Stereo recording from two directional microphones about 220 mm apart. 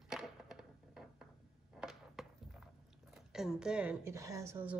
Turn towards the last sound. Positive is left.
turn(degrees=-10)  # may be behind; listen again after turning